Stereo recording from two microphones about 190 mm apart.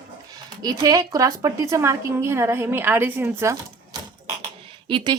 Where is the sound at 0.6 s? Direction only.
20° right (ahead or behind).